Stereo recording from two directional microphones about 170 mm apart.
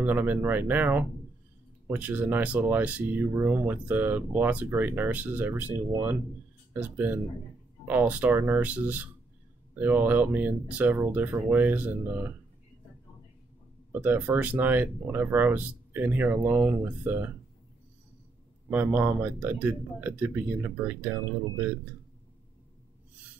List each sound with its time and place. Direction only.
0.0 s speech: 10° right (ahead or behind)
14.0 s speech: 10° right (ahead or behind)
18.7 s speech: 10° right (ahead or behind)